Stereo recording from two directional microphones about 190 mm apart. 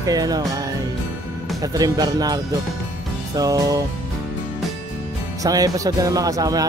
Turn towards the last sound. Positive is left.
turn(degrees=-20)  # may be behind; listen again after turning